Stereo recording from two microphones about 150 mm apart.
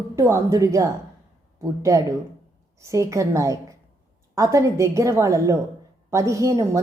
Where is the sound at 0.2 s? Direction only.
20° right (ahead or behind).